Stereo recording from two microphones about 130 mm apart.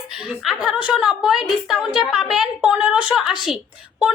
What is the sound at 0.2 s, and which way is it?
A woman's voice, 5° right (ahead or behind).